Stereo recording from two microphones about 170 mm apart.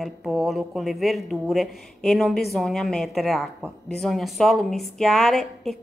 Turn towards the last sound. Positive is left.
turn(degrees=0)  # may be behind; listen again after turning